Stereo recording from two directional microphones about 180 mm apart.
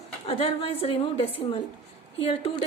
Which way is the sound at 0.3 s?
30° left (ahead or behind).